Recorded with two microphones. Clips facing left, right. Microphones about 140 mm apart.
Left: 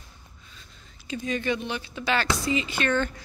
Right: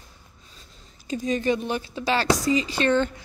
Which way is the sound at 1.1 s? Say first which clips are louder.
Right 4 dB; 40° right (ahead or behind).